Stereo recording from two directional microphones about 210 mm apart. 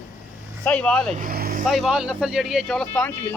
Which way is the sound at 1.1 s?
45° right (ahead or behind).